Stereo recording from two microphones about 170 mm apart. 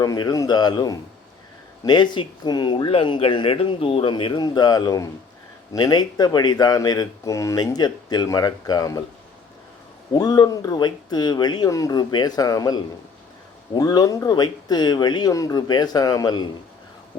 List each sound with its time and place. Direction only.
0.0 s a man's voice: 20° left (ahead or behind)
10.2 s a man's voice: 20° left (ahead or behind)